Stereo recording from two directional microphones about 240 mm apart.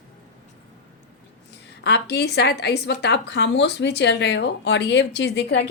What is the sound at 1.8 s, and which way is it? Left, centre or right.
A woman's voice, left.